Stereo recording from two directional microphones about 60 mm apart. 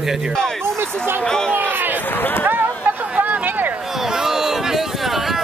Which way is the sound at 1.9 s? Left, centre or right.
Left.